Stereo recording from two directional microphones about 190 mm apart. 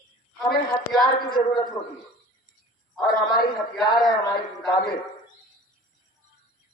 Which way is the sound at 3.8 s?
20° left (ahead or behind).